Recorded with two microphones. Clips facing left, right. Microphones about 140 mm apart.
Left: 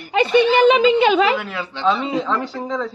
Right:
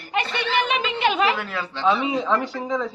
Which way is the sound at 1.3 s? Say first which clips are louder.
Left 3 dB; centre (ahead or behind).